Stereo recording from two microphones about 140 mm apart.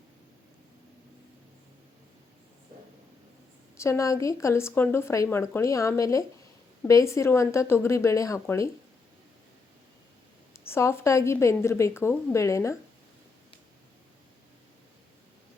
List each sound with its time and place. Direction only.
3.8 s speech: 20° left (ahead or behind)
10.7 s speech: 20° left (ahead or behind)